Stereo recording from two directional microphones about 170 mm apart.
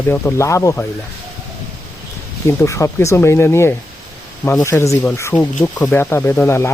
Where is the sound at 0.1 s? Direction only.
15° left (ahead or behind).